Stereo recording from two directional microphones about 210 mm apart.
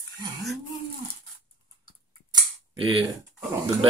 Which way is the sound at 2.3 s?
25° right (ahead or behind).